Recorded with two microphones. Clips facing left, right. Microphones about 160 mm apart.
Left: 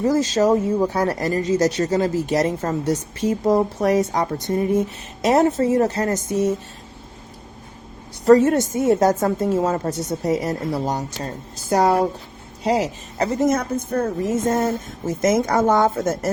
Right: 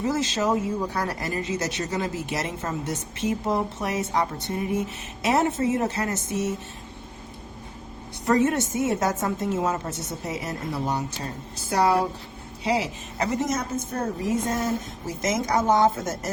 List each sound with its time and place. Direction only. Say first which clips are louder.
0.0 s a woman's voice: left 7 dB; 40° left (ahead or behind)
8.3 s a woman's voice: left 8 dB; 35° left (ahead or behind)
11.7 s speech: left 4 dB; 50° left (ahead or behind)
13.5 s speech: left 6 dB; 60° left (ahead or behind)